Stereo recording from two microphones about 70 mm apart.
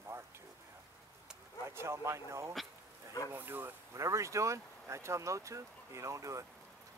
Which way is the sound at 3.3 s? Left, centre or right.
Right.